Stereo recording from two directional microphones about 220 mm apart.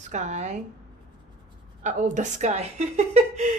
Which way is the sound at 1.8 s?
35° right (ahead or behind).